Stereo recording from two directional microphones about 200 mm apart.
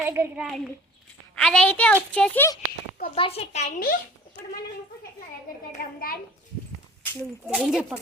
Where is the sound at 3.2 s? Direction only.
30° left (ahead or behind).